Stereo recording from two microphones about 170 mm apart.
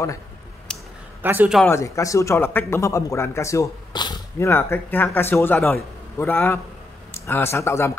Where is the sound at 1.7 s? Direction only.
20° left (ahead or behind).